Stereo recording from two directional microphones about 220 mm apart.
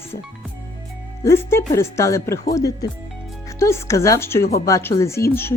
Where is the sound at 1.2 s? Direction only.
10° left (ahead or behind).